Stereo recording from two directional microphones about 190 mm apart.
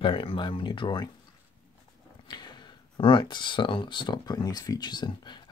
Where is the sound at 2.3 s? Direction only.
25° left (ahead or behind).